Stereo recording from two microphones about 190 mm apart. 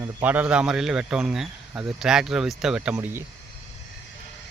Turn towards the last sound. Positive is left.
turn(degrees=-10)  # may be behind; listen again after turning